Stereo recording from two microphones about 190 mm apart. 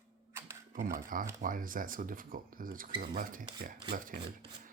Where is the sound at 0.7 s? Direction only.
45° right (ahead or behind).